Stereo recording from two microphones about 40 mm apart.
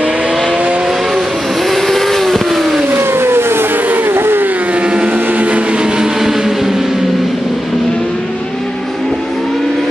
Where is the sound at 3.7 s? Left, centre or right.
Right.